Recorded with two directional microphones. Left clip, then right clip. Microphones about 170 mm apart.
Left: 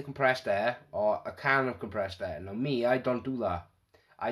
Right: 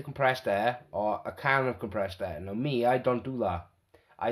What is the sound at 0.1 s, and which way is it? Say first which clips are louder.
Speech: right 1 dB; 20° right (ahead or behind).